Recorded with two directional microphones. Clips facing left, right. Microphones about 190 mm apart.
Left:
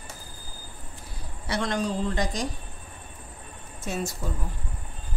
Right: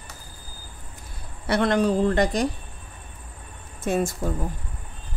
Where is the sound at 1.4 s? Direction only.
60° right (ahead or behind).